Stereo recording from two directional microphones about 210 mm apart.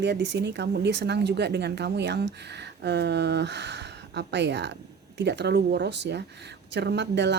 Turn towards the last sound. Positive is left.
turn(degrees=-55)  # may be behind; listen again after turning